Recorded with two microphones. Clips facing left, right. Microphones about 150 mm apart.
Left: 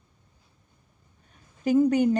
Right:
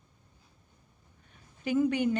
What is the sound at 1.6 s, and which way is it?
Speech, 40° left (ahead or behind).